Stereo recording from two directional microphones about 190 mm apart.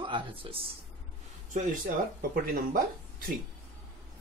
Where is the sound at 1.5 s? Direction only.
45° right (ahead or behind).